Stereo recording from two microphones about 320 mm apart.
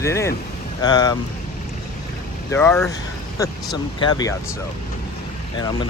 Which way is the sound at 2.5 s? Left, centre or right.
Centre.